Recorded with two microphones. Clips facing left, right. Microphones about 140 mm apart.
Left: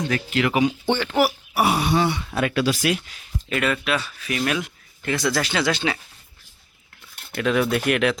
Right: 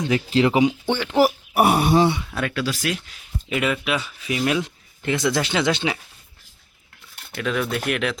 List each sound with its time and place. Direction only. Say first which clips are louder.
0.3 s speech: right 3 dB; 30° right (ahead or behind)
0.9 s speech: left 1 dB; 10° right (ahead or behind)
1.5 s speech: right 3 dB; 50° right (ahead or behind)
2.2 s speech: left 3 dB; 5° left (ahead or behind)
2.5 s speech: left 5 dB; 15° left (ahead or behind)
3.5 s speech: even; 15° right (ahead or behind)
7.3 s speech: left 4 dB; centre (ahead or behind)